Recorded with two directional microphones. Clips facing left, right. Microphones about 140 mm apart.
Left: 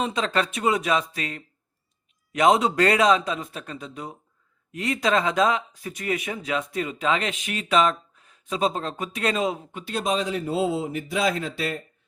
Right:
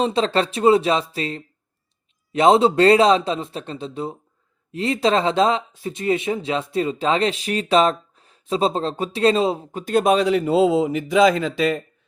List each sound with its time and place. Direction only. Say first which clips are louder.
0.0 s speech: right 5 dB; 30° right (ahead or behind)
9.8 s speech: right 9 dB; 55° right (ahead or behind); by 11.7 s 90° right